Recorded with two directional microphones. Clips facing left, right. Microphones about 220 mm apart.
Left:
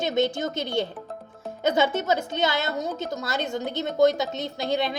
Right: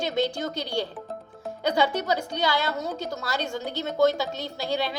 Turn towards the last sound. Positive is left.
turn(degrees=20)  # may be behind; listen again after turning